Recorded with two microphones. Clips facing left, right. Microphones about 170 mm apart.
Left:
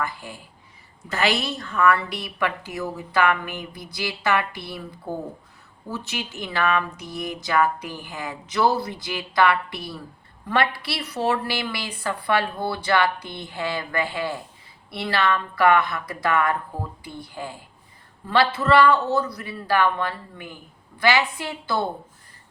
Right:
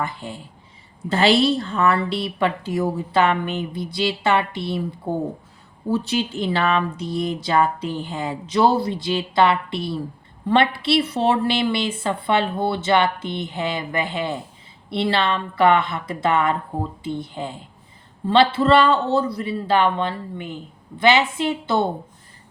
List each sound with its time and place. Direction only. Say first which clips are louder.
0.0 s a woman's voice: right 2 dB; 25° right (ahead or behind)